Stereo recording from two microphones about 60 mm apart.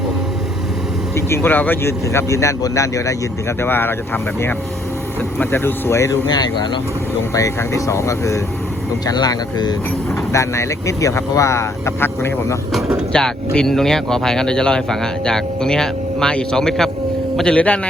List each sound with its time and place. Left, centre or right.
1.1 s speech: left
1.8 s speech: left
3.6 s speech: left
7.3 s speech: left
9.0 s speech: left
10.3 s speech: left
13.1 s speech: centre
17.4 s speech: centre